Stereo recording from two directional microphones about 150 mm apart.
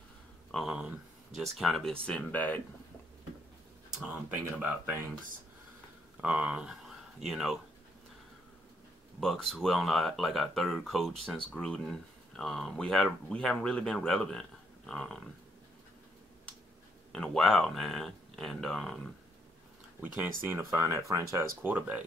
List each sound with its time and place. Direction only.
0.5 s a sound: centre (ahead or behind)
4.3 s speech: 10° right (ahead or behind)
6.2 s speech: 10° right (ahead or behind)
9.2 s speech: centre (ahead or behind)
17.1 s speech: 5° left (ahead or behind)
20.4 s speech: 15° right (ahead or behind)